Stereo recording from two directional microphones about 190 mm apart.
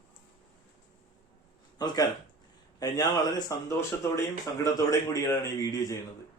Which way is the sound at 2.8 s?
20° left (ahead or behind).